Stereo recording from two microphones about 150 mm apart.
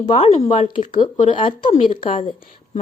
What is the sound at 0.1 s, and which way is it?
Speech, 45° left (ahead or behind).